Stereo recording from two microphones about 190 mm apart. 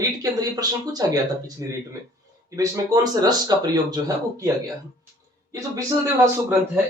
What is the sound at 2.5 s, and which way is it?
Speech, 15° right (ahead or behind).